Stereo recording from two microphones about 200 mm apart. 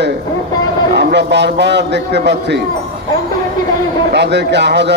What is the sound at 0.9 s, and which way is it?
A man's voice, 60° right (ahead or behind).